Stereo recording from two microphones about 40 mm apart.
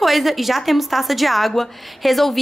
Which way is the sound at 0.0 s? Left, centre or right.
Centre.